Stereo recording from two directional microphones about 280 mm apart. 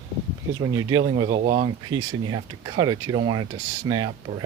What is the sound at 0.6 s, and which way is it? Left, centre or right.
Speech, centre.